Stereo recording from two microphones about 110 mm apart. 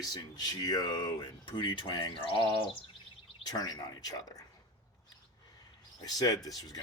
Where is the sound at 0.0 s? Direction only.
40° left (ahead or behind).